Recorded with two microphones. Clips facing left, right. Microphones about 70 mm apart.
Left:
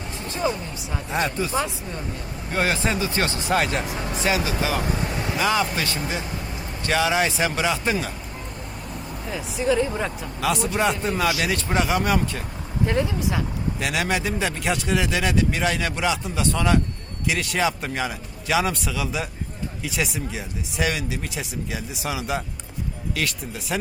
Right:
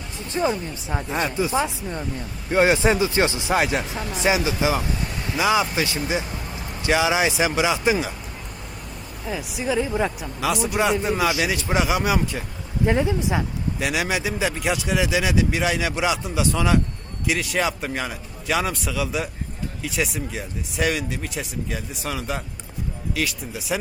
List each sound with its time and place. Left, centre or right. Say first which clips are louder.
1.1 s speech: even; centre
1.5 s a man's voice: right 2 dB; centre
4.2 s a man's voice: right 3 dB; right
4.9 s vehicle: left 3 dB; left
5.4 s speech: right 3 dB; centre
9.3 s speech: left 2 dB; centre
12.8 s a man's voice: right 2 dB; centre
13.7 s speech: right 1 dB; centre